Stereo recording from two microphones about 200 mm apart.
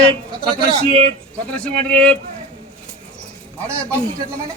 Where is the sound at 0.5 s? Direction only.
25° right (ahead or behind).